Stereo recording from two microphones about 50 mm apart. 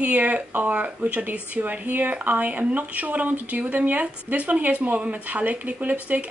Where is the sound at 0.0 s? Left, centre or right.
Right.